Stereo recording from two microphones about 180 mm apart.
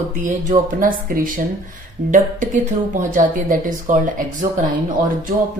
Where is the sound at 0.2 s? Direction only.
45° right (ahead or behind).